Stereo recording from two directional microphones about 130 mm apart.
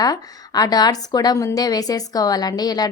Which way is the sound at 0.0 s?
30° left (ahead or behind).